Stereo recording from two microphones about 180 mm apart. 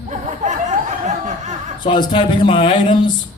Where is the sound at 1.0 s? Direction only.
40° right (ahead or behind).